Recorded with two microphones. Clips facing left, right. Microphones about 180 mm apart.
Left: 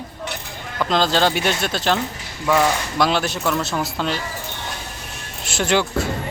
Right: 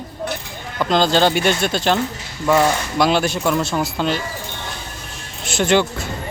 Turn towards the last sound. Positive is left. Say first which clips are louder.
# right 3 dB
turn(degrees=5)  # may be behind; listen again after turning